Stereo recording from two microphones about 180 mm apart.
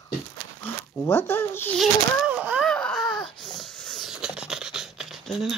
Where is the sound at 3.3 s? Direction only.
Centre (ahead or behind).